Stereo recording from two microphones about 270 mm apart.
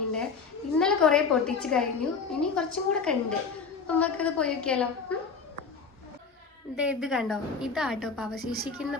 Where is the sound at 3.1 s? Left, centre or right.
Centre.